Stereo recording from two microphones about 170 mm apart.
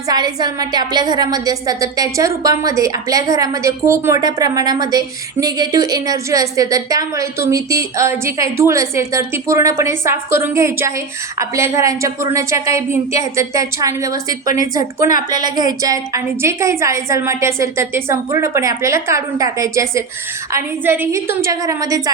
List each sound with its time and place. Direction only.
0.1 s a woman's voice: 25° right (ahead or behind)